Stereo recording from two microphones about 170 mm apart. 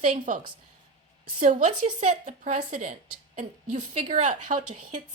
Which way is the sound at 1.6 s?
40° right (ahead or behind).